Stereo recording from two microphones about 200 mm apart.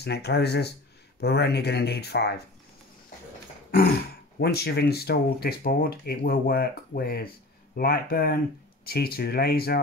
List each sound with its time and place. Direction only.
0.0 s speech: 55° left (ahead or behind)
4.4 s speech: 55° left (ahead or behind)